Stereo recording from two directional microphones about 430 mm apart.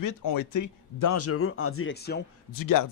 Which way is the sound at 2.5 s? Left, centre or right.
Left.